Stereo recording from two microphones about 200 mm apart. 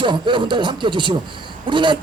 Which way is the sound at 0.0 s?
25° right (ahead or behind).